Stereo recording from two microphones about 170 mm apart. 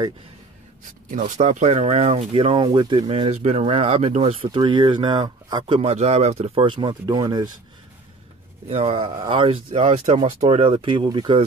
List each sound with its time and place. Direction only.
0.8 s speech: 50° right (ahead or behind); by 7.4 s 25° right (ahead or behind)
8.6 s speech: 35° right (ahead or behind)